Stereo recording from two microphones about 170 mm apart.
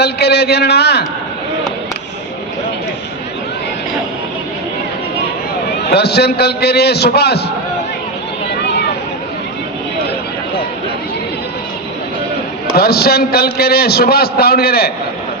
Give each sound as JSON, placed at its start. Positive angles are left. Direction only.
{"t": 0.0, "sound": "a man's voice", "side_deg": 75}
{"t": 5.9, "sound": "a man's voice", "side_deg": 75}
{"t": 12.6, "sound": "a man's voice", "side_deg": 65}